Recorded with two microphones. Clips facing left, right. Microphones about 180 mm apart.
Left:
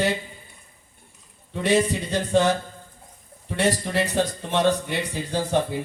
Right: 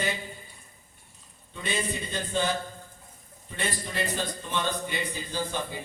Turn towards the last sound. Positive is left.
turn(degrees=65)  # may be behind; listen again after turning